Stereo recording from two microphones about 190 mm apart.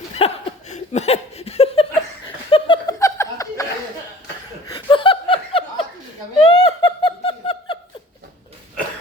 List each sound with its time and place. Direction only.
0.2 s chuckle: 30° left (ahead or behind)
2.2 s laughter: 25° left (ahead or behind)
3.0 s chuckle: 15° left (ahead or behind)
4.6 s laughter: 25° left (ahead or behind)
6.4 s snicker: 25° left (ahead or behind)